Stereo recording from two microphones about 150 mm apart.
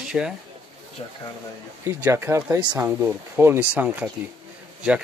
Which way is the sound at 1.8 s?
15° right (ahead or behind).